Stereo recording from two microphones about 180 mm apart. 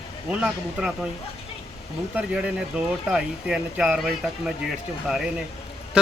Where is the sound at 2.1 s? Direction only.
5° right (ahead or behind).